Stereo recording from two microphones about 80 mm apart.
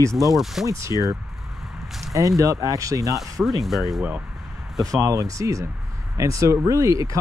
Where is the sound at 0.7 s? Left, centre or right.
Right.